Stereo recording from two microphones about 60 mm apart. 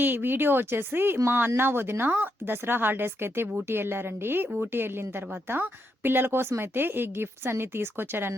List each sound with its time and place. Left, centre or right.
0.0 s speech: right